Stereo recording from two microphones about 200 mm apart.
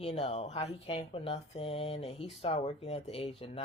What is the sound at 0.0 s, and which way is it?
Speech, 30° left (ahead or behind).